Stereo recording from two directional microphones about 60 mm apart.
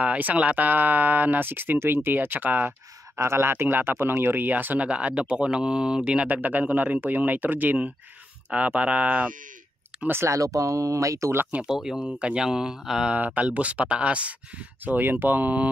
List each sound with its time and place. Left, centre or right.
0.0 s speech: right
3.2 s speech: right
4.8 s speech: centre
10.2 s speech: right
11.6 s speech: centre
13.1 s speech: right